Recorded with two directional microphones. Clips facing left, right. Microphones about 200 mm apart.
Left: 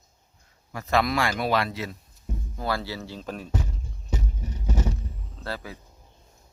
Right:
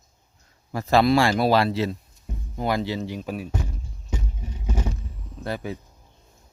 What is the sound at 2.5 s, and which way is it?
Speech, 20° right (ahead or behind).